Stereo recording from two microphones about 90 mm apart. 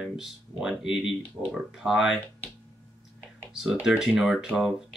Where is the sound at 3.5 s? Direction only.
5° right (ahead or behind).